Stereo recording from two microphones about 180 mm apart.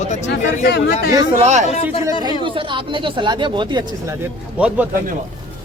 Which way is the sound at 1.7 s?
35° left (ahead or behind).